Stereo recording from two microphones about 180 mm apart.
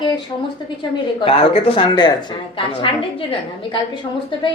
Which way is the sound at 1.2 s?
30° left (ahead or behind).